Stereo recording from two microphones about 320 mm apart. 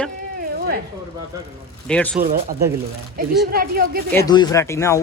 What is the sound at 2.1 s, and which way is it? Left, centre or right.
Speech, right.